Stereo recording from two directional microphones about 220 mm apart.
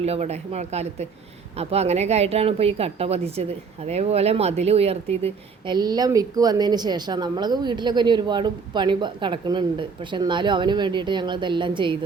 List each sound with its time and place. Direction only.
0.0 s speech: 30° right (ahead or behind)